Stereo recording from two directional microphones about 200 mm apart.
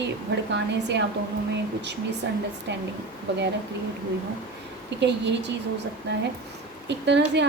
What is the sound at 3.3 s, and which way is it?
Speech, 60° right (ahead or behind).